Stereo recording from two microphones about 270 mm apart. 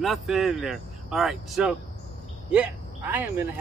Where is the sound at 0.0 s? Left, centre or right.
Centre.